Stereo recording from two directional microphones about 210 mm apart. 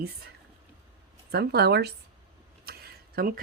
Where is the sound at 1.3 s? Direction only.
50° right (ahead or behind).